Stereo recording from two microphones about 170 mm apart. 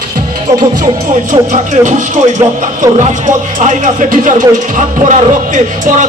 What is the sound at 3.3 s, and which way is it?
Speech, 45° right (ahead or behind).